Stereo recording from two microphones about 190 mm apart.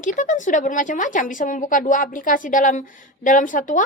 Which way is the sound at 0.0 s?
40° left (ahead or behind).